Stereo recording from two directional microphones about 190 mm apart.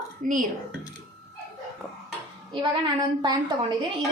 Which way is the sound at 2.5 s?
25° right (ahead or behind).